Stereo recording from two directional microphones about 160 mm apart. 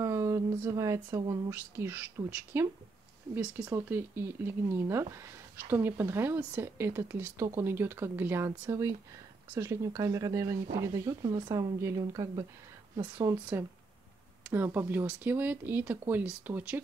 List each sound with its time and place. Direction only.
0.0 s a sound: 20° right (ahead or behind)
1.5 s speech: 15° right (ahead or behind)
3.7 s speech: 15° right (ahead or behind)
14.5 s speech: 10° right (ahead or behind)